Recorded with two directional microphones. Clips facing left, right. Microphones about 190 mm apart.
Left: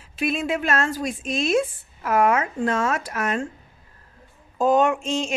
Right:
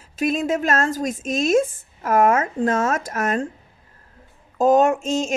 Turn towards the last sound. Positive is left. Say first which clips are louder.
# right 3 dB
turn(degrees=-45)  # may be behind; listen again after turning